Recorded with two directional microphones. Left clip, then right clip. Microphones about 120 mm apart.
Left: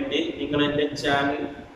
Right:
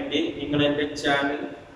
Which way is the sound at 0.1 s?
5° right (ahead or behind).